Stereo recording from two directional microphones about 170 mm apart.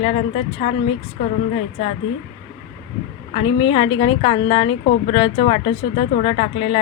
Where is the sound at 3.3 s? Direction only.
30° left (ahead or behind).